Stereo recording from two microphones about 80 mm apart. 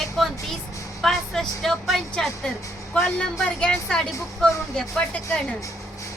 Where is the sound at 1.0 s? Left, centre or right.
Centre.